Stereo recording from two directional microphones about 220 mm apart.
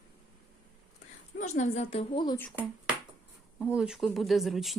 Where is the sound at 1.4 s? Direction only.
30° left (ahead or behind).